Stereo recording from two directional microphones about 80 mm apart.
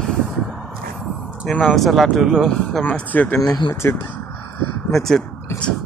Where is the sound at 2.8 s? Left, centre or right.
Left.